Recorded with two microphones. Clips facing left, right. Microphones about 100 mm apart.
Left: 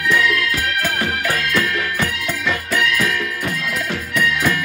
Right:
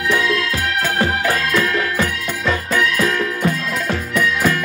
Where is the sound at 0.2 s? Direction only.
25° right (ahead or behind).